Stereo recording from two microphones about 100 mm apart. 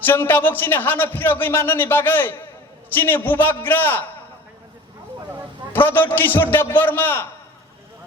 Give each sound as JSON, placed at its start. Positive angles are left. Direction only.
{"t": 0.0, "sound": "a man's voice", "side_deg": 20}
{"t": 5.7, "sound": "a man's voice", "side_deg": 20}